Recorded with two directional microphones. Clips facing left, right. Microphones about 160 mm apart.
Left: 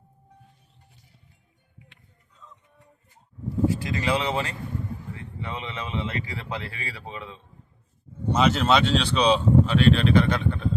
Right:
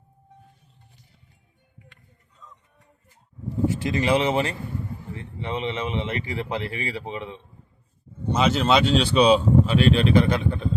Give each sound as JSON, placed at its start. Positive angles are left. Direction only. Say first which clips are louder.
{"t": 3.8, "sound": "speech", "louder": "right 4 dB", "side_deg": -25}
{"t": 8.3, "sound": "speech", "louder": "even", "side_deg": 0}